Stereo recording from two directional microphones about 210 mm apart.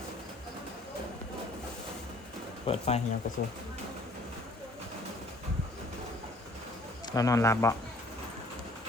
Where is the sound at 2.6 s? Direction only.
30° left (ahead or behind).